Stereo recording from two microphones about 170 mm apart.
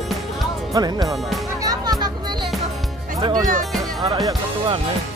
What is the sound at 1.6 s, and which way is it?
Music, 20° right (ahead or behind).